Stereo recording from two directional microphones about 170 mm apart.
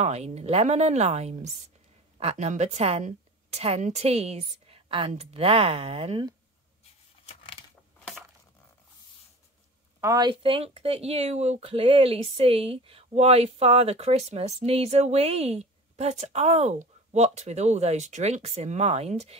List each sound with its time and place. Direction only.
0.0 s speech: 40° right (ahead or behind)
6.8 s a sound: 35° left (ahead or behind)
9.9 s a woman's voice: 20° right (ahead or behind)
10.4 s speech: 35° right (ahead or behind)